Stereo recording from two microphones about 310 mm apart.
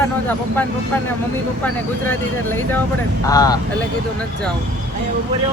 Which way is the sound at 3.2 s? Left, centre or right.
Centre.